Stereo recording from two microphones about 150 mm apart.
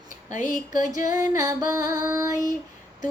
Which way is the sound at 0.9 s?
60° left (ahead or behind).